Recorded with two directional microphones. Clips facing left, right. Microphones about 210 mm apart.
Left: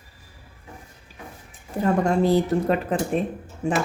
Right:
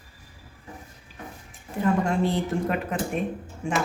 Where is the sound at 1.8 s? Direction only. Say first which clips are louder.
Left 3 dB; 40° left (ahead or behind).